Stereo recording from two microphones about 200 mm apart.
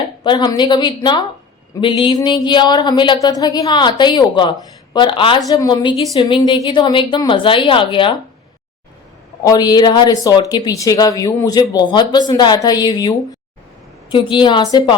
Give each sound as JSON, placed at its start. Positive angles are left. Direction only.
{"t": 0.2, "sound": "speech", "side_deg": 20}
{"t": 9.4, "sound": "speech", "side_deg": 20}